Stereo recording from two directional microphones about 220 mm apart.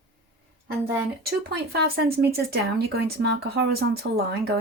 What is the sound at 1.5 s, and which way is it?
Speech, 50° right (ahead or behind).